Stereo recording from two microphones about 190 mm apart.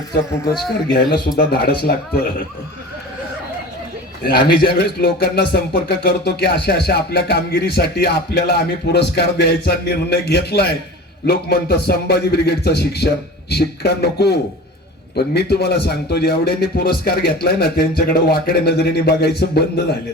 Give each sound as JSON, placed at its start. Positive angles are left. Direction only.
{"t": 0.9, "sound": "speech", "side_deg": 50}
{"t": 4.2, "sound": "speech", "side_deg": 55}